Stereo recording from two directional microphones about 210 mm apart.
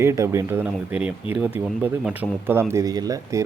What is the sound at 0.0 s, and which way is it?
Speech, 15° right (ahead or behind).